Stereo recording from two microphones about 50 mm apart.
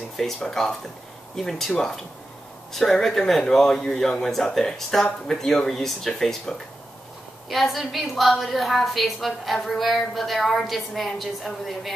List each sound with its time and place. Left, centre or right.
0.2 s a woman's voice: centre